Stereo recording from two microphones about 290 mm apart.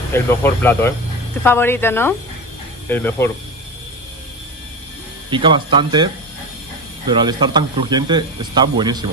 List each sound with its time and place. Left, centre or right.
0.1 s speech: centre
5.3 s speech: centre
7.1 s speech: centre